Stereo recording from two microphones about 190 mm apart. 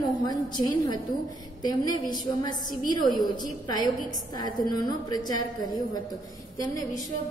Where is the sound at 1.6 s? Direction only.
20° left (ahead or behind).